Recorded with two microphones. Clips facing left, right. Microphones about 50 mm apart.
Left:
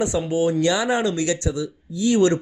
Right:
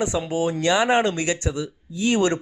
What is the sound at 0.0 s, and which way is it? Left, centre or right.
Speech, right.